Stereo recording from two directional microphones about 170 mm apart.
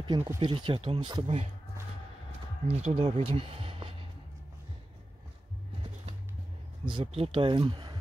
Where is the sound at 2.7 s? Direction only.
40° right (ahead or behind).